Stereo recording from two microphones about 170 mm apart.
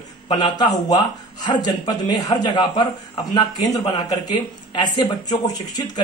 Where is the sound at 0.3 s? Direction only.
25° left (ahead or behind).